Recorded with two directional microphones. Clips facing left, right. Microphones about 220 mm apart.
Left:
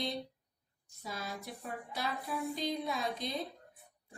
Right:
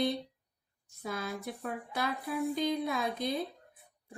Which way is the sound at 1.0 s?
55° right (ahead or behind).